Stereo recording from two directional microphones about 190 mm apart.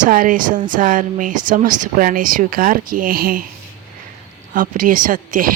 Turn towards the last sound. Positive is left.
turn(degrees=-45)  # may be behind; listen again after turning